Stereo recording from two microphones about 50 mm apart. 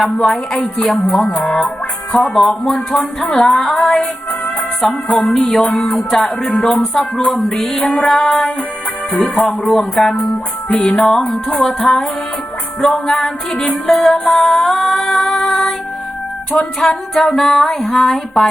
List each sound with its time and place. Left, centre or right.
0.3 s music: centre
0.9 s speech: centre
1.4 s music: centre
2.2 s speech: centre
2.6 s music: centre
3.0 s music: centre
4.9 s music: left
5.3 s music: centre
7.3 s speech: centre
7.6 s music: centre
11.2 s speech: centre
12.8 s music: centre
16.8 s music: centre